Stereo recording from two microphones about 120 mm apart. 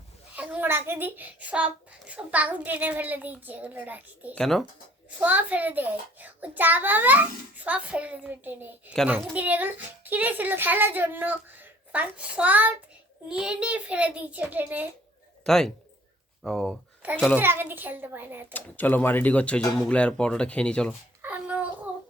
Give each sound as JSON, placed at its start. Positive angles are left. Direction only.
{"t": 0.3, "sound": "a child's voice", "side_deg": -10}
{"t": 4.4, "sound": "speech", "side_deg": 5}
{"t": 5.2, "sound": "a child's voice", "side_deg": -15}
{"t": 15.4, "sound": "speech", "side_deg": 5}
{"t": 17.3, "sound": "a child's voice", "side_deg": -15}
{"t": 18.5, "sound": "speech", "side_deg": 15}
{"t": 21.2, "sound": "a sound", "side_deg": -10}